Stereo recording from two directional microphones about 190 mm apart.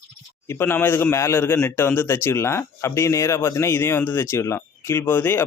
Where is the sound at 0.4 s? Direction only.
10° left (ahead or behind).